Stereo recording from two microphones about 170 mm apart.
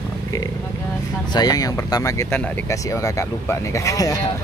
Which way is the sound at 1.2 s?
25° left (ahead or behind).